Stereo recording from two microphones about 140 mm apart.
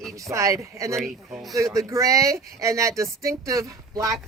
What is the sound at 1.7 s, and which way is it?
Speech, 25° right (ahead or behind).